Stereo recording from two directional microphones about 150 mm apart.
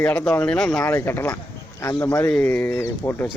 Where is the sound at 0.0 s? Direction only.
10° left (ahead or behind).